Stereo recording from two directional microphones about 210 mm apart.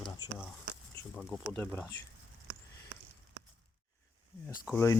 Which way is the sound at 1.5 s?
10° left (ahead or behind).